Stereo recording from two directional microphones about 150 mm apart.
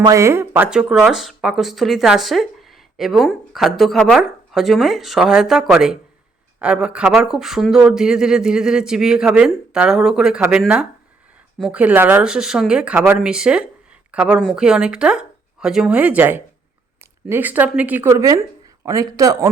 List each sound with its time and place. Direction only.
0.0 s speech: 20° right (ahead or behind)